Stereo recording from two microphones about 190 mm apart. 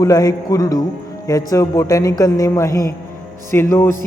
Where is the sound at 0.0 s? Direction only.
20° left (ahead or behind).